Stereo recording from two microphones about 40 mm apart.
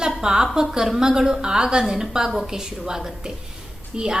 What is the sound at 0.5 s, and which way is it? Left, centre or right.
A woman's voice, centre.